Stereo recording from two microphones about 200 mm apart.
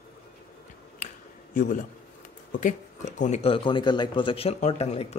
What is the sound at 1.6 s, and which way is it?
Speech, 40° left (ahead or behind).